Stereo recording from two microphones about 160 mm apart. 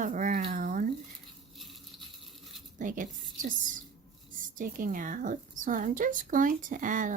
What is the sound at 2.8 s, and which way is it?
A woman's voice, 55° right (ahead or behind).